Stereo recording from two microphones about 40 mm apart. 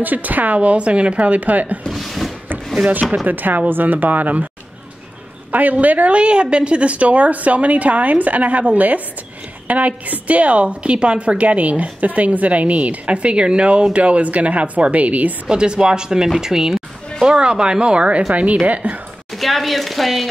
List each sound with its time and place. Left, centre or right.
0.0 s a woman's voice: right
1.9 s a sound: centre
2.9 s a woman's voice: right
5.5 s a woman's voice: right
15.4 s a woman's voice: right
19.3 s speech: centre